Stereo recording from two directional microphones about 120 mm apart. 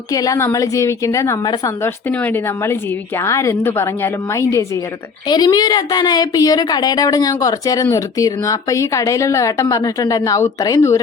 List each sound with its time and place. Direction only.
0.1 s speech: 30° left (ahead or behind)
1.8 s speech: 15° left (ahead or behind)
5.3 s speech: 35° left (ahead or behind)